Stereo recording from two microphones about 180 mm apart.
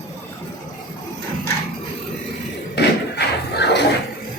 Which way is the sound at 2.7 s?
65° left (ahead or behind).